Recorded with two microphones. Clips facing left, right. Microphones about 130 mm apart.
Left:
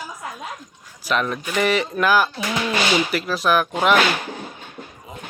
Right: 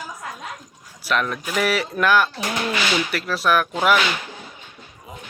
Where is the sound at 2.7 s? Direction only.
30° left (ahead or behind).